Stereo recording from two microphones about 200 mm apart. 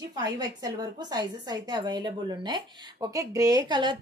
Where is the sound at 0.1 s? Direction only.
20° right (ahead or behind).